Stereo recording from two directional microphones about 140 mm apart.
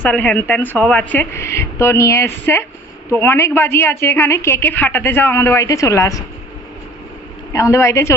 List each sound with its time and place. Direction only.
0.0 s a woman's voice: 10° left (ahead or behind)
7.5 s speech: 20° left (ahead or behind)